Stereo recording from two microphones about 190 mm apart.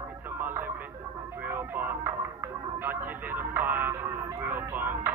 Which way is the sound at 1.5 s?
10° right (ahead or behind).